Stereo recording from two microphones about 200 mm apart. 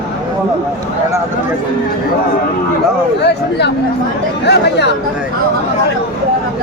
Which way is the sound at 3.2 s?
55° left (ahead or behind).